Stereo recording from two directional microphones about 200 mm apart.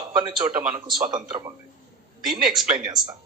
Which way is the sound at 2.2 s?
Centre (ahead or behind).